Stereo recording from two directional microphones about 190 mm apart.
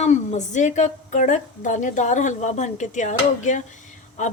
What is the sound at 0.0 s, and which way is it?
Speech, 35° left (ahead or behind).